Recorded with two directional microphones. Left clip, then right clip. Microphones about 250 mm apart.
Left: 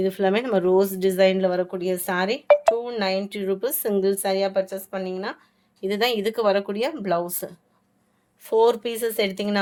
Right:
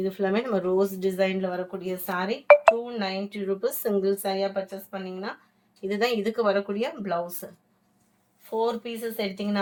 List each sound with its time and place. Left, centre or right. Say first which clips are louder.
0.0 s speech: left 4 dB; left